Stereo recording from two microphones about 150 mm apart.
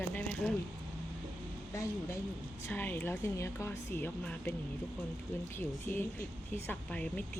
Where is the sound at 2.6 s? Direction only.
10° left (ahead or behind).